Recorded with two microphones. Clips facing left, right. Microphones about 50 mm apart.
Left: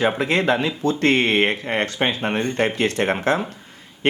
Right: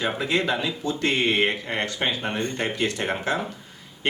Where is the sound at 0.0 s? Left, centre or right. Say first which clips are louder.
Left 5 dB; left.